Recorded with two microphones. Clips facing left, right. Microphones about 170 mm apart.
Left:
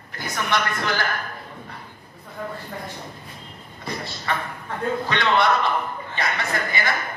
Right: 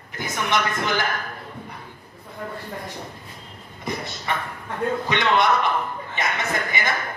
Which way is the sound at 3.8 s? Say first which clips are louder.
Right 1 dB; 20° right (ahead or behind).